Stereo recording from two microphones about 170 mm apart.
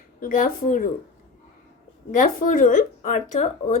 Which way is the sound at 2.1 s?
50° left (ahead or behind).